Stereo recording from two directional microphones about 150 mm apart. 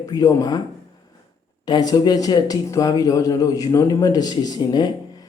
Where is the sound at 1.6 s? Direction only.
25° left (ahead or behind).